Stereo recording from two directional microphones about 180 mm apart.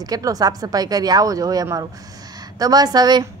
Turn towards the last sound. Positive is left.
turn(degrees=-20)  # may be behind; listen again after turning